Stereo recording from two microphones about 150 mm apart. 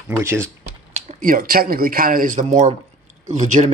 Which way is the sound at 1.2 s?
70° right (ahead or behind).